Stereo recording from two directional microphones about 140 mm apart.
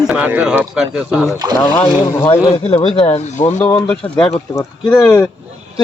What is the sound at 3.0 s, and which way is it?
Speech, 45° left (ahead or behind).